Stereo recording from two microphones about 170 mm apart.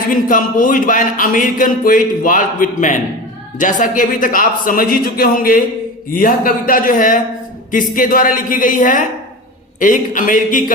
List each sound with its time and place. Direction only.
0.1 s a man's voice: 55° left (ahead or behind)